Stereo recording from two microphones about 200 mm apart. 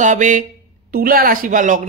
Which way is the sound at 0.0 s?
40° right (ahead or behind).